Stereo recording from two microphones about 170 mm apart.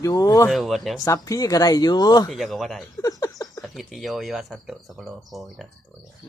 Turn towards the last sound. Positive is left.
turn(degrees=0)  # may be behind; listen again after turning